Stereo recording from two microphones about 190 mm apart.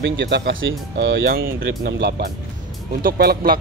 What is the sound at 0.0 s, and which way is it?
Speech, 65° right (ahead or behind).